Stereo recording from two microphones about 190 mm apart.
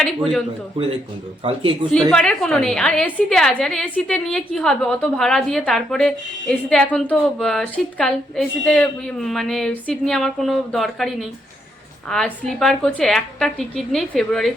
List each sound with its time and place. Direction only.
0.0 s a woman's voice: 5° left (ahead or behind)
1.5 s speech: 30° right (ahead or behind)
1.9 s a woman's voice: 5° left (ahead or behind)